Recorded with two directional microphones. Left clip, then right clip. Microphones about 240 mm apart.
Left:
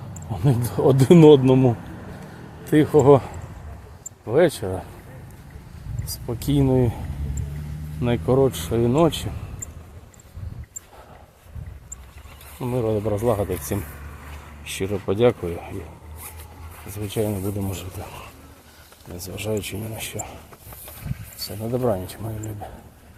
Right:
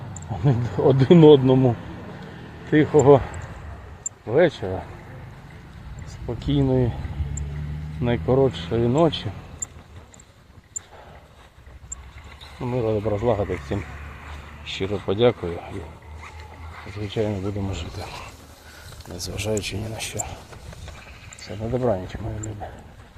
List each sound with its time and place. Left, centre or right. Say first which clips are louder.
0.3 s speech: left 1 dB; centre
4.3 s speech: even; centre
6.2 s speech: left 1 dB; centre
8.0 s speech: left 1 dB; centre
12.5 s speech: even; centre
17.1 s speech: even; centre
17.3 s speech: even; left
21.4 s speech: even; centre